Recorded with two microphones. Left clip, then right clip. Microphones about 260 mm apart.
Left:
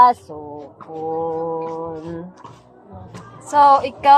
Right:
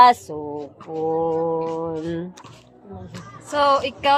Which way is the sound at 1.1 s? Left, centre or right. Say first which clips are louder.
Right 1 dB; right.